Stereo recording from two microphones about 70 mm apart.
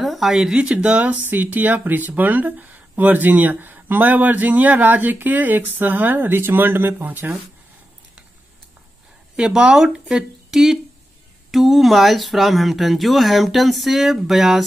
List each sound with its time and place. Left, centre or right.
0.0 s speech: centre; by 7.3 s right
9.4 s speech: centre